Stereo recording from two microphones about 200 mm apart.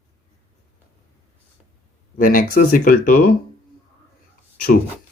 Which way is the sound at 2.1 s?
45° left (ahead or behind).